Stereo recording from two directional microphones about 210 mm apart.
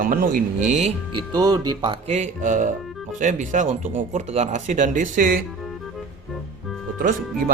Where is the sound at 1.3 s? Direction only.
20° right (ahead or behind); by 5.4 s 40° right (ahead or behind).